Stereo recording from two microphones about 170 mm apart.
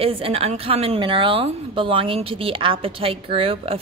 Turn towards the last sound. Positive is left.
turn(degrees=-35)  # may be behind; listen again after turning